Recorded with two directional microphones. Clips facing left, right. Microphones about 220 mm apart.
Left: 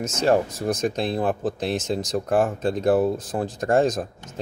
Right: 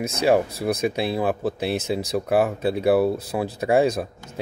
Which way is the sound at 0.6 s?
10° right (ahead or behind).